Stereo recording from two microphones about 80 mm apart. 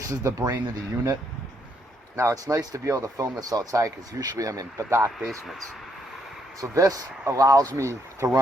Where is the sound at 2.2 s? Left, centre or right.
Right.